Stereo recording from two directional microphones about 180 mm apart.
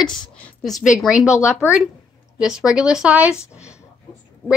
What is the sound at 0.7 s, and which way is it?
A woman's voice, centre (ahead or behind).